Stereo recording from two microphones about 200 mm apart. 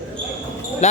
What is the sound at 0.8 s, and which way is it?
Speech, 35° left (ahead or behind).